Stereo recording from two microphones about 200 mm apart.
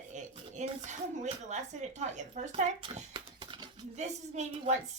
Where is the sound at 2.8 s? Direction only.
25° right (ahead or behind).